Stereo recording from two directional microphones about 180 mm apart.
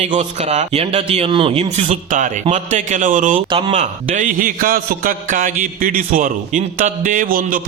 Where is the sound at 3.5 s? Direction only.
35° right (ahead or behind); by 7.6 s 50° right (ahead or behind).